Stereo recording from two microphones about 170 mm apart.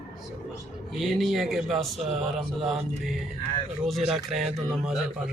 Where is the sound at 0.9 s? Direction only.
Centre (ahead or behind).